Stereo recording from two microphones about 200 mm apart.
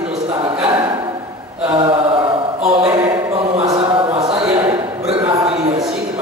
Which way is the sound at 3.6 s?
25° right (ahead or behind).